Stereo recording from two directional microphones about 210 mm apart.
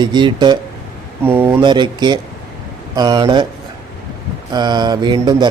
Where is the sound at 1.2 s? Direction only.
10° right (ahead or behind).